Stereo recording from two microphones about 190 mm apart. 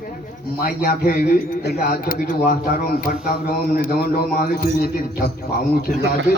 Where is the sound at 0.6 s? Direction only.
50° left (ahead or behind).